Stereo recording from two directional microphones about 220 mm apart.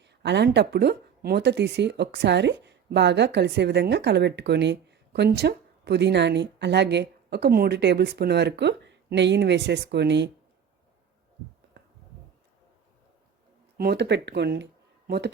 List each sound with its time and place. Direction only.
0.0 s speech: 50° right (ahead or behind)
13.7 s speech: 45° right (ahead or behind)